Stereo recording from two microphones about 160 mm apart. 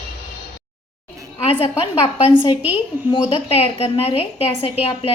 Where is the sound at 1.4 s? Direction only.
35° left (ahead or behind).